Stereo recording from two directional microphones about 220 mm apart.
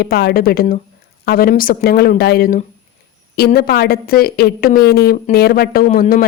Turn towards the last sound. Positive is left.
turn(degrees=35)  # may be behind; listen again after turning